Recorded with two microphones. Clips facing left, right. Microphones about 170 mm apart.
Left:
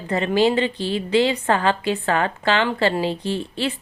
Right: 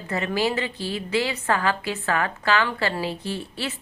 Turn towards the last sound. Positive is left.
turn(degrees=25)  # may be behind; listen again after turning